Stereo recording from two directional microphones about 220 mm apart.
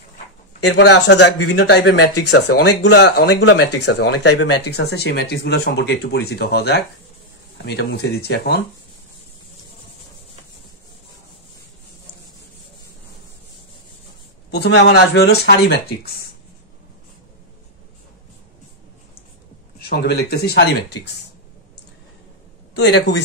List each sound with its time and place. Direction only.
0.7 s speech: 50° left (ahead or behind)
14.5 s speech: 50° left (ahead or behind)
19.9 s speech: 45° left (ahead or behind)
22.8 s speech: 50° left (ahead or behind)